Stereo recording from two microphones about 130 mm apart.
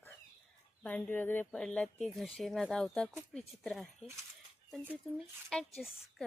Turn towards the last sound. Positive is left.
turn(degrees=5)  # may be behind; listen again after turning